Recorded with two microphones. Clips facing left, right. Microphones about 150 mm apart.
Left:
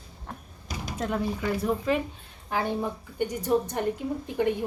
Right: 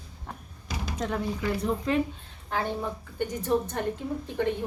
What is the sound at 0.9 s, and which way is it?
A woman's voice, 5° left (ahead or behind).